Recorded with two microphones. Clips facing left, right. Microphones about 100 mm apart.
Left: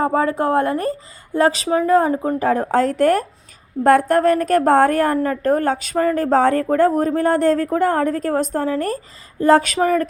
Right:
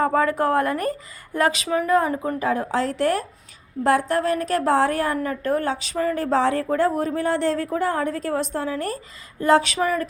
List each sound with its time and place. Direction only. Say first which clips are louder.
0.0 s a woman's voice: left 2 dB; 25° left (ahead or behind)
2.4 s a woman's voice: left 6 dB; 40° left (ahead or behind)